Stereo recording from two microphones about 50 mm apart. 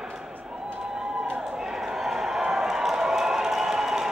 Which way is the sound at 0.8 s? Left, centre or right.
Centre.